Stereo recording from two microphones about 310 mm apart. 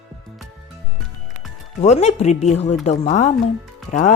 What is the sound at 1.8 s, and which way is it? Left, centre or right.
Speech, left.